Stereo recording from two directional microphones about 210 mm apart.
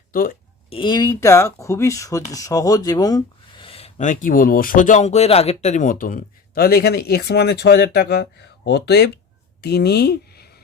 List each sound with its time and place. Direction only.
0.1 s speech: 40° left (ahead or behind)
0.7 s speech: 25° left (ahead or behind); by 10.5 s 50° left (ahead or behind)